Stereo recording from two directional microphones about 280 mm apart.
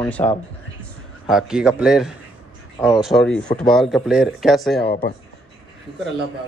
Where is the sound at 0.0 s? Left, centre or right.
Centre.